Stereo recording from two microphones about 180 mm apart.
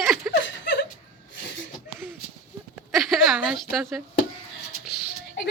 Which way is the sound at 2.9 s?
Centre (ahead or behind).